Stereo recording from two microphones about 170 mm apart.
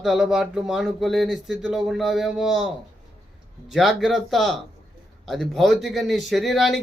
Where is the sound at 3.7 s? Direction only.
Centre (ahead or behind).